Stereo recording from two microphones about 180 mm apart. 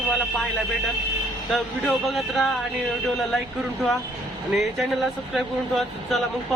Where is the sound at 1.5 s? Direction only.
Centre (ahead or behind).